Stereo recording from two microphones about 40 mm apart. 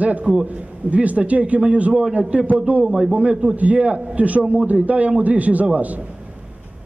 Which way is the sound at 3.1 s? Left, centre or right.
Right.